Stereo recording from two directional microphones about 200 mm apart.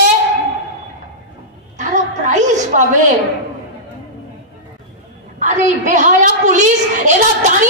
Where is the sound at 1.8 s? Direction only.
40° right (ahead or behind).